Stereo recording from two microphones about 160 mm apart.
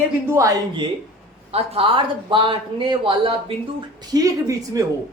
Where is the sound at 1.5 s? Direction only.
40° right (ahead or behind); by 4.8 s 20° right (ahead or behind).